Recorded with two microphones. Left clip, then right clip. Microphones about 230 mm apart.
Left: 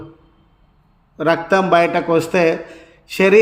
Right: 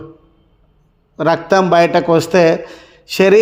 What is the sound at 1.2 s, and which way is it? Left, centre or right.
A man's voice, right.